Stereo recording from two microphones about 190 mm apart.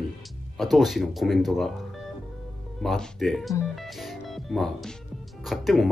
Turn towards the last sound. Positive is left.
turn(degrees=0)  # may be behind; listen again after turning